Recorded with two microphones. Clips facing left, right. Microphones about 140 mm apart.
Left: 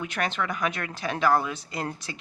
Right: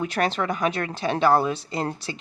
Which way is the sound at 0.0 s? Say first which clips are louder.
Right 5 dB; 35° right (ahead or behind).